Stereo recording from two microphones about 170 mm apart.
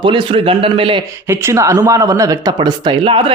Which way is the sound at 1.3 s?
15° right (ahead or behind).